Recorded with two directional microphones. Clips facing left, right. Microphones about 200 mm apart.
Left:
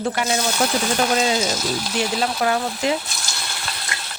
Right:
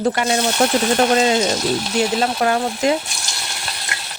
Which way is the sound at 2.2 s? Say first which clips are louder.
Right 3 dB; 45° right (ahead or behind).